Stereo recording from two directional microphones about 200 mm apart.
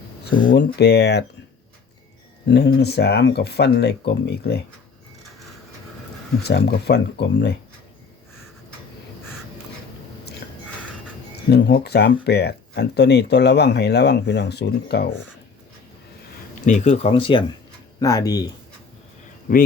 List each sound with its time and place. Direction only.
0.3 s speech: 55° left (ahead or behind)
2.5 s speech: 55° left (ahead or behind)
6.4 s speech: 55° left (ahead or behind)
11.5 s speech: 55° left (ahead or behind)
16.6 s speech: 35° left (ahead or behind); by 18.5 s 20° left (ahead or behind)
19.5 s speech: 45° left (ahead or behind)